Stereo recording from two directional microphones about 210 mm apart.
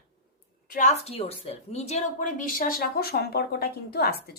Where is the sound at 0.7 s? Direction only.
35° left (ahead or behind).